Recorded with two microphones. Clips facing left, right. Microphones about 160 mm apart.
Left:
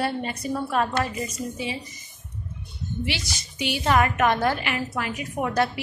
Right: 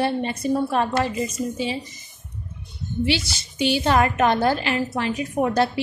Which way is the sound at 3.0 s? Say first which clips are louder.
Right 9 dB; 30° right (ahead or behind).